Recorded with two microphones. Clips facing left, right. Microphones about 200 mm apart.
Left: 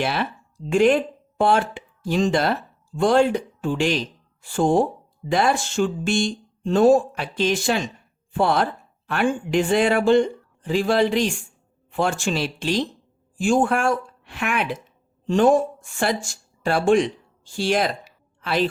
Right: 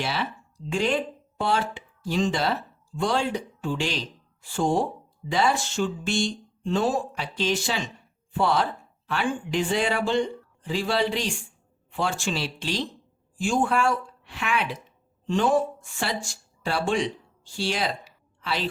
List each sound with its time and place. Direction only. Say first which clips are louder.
0.0 s speech: left 5 dB; 55° left (ahead or behind)